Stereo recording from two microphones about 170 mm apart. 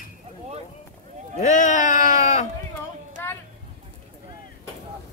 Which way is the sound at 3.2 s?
15° left (ahead or behind).